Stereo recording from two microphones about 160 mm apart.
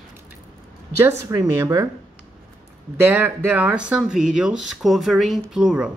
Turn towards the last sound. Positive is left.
turn(degrees=-5)  # may be behind; listen again after turning